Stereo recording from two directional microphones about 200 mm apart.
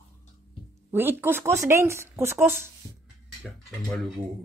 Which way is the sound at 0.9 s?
10° right (ahead or behind).